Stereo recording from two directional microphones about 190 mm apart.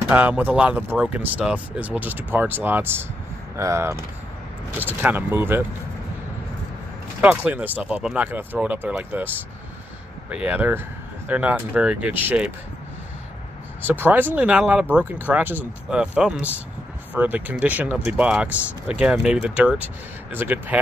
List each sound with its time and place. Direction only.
0.1 s speech: 10° right (ahead or behind)
7.2 s speech: 5° right (ahead or behind)
10.3 s speech: 5° right (ahead or behind)
13.8 s speech: 10° right (ahead or behind)